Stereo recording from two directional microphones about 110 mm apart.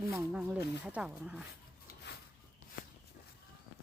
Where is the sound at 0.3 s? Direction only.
10° right (ahead or behind).